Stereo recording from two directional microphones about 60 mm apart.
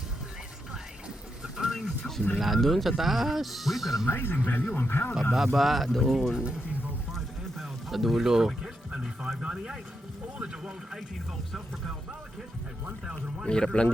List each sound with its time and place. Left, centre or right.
0.7 s a sound: centre
1.7 s music: centre
2.4 s speech: centre
4.1 s speech: left
5.3 s speech: centre
7.6 s speech: centre
13.4 s a man's voice: centre